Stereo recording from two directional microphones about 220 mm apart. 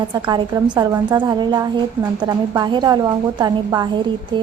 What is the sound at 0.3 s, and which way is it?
A woman's voice, 20° right (ahead or behind).